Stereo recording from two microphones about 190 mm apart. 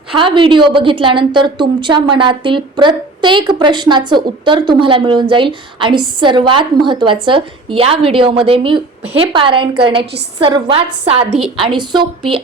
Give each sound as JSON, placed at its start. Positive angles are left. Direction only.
{"t": 0.1, "sound": "a woman's voice", "side_deg": -25}
{"t": 11.3, "sound": "a woman's voice", "side_deg": -5}
{"t": 11.5, "sound": "a woman's voice", "side_deg": -25}